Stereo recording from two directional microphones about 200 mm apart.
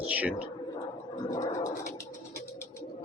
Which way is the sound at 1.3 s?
15° left (ahead or behind).